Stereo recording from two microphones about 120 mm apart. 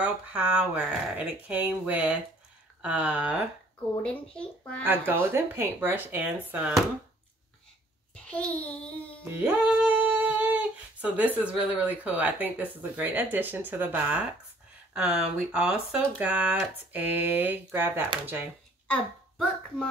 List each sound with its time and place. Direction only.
0.0 s speech: 10° right (ahead or behind)
4.0 s speech: 10° left (ahead or behind)
4.8 s speech: 15° right (ahead or behind)
8.3 s speech: 10° left (ahead or behind)
9.2 s music: 15° right (ahead or behind)
12.9 s speech: 15° right (ahead or behind)
18.9 s a child's voice: 10° left (ahead or behind)